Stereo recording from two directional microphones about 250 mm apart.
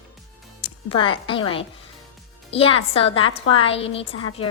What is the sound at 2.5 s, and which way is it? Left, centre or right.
Speech, left.